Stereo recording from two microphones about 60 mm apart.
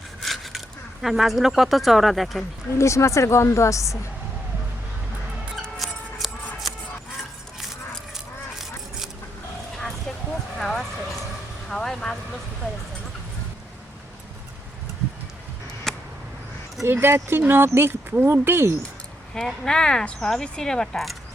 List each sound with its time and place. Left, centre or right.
0.2 s a sound: centre
1.0 s speech: centre
2.7 s a woman's voice: left
5.8 s music: centre
7.6 s a sound: centre
10.6 s clip-clop: centre
11.7 s vehicle: centre
15.9 s a sound: centre
16.8 s speech: right
19.3 s speech: centre